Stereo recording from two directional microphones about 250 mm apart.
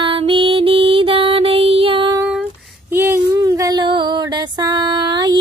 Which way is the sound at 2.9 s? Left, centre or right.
Centre.